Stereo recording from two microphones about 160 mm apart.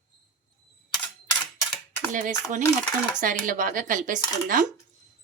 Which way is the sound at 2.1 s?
55° right (ahead or behind).